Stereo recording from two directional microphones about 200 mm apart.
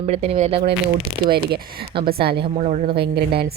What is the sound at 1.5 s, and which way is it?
Speech, 50° right (ahead or behind).